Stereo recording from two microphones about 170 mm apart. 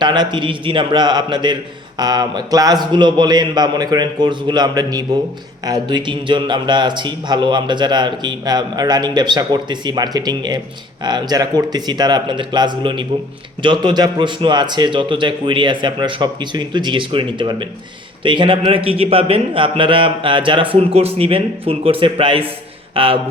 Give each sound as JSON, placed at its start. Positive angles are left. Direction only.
{"t": 0.0, "sound": "a man's voice", "side_deg": -25}